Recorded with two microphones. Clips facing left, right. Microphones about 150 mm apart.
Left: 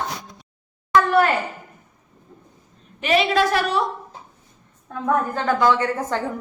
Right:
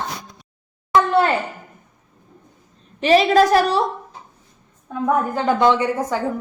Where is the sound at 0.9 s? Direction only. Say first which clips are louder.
Right 1 dB; 25° right (ahead or behind).